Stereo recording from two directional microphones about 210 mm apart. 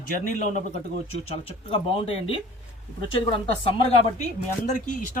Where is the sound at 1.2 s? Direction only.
25° left (ahead or behind).